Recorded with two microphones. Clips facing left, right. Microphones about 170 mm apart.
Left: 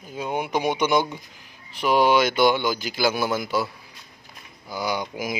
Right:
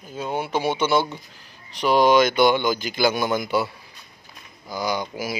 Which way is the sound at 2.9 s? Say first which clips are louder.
Right 1 dB; 5° left (ahead or behind).